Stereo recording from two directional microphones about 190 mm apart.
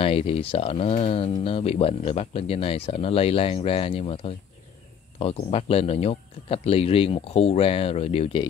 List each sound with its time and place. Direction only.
0.0 s speech: 30° left (ahead or behind)